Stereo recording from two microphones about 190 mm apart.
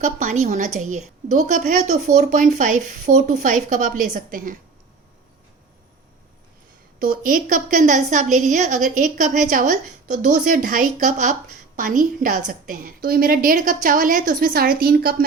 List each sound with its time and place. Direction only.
0.0 s a woman's voice: 45° right (ahead or behind)
7.0 s a woman's voice: 45° right (ahead or behind)